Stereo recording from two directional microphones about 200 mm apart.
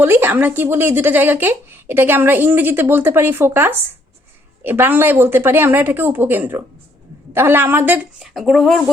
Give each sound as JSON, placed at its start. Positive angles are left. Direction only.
{"t": 0.0, "sound": "speech", "side_deg": -10}